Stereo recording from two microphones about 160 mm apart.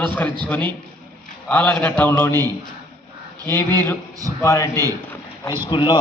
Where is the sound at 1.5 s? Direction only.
10° left (ahead or behind).